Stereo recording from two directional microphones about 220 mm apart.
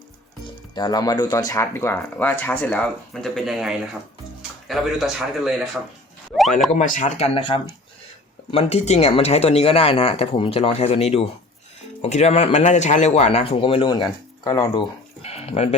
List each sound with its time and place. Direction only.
0.8 s a man's voice: 20° left (ahead or behind); by 5.8 s centre (ahead or behind)
6.7 s speech: 35° left (ahead or behind); by 14.8 s 15° left (ahead or behind)
15.2 s a sound: 30° left (ahead or behind)